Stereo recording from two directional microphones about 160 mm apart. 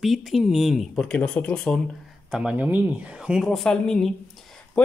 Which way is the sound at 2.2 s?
5° right (ahead or behind).